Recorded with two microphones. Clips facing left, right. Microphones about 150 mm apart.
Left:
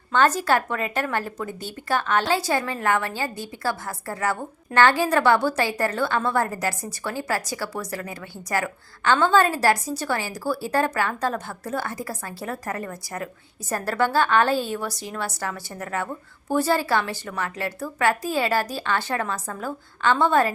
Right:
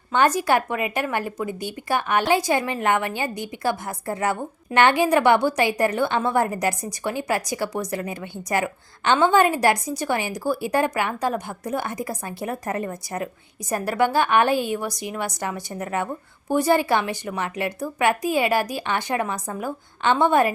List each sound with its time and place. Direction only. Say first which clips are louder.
0.1 s a woman's voice: right 1 dB; 15° right (ahead or behind)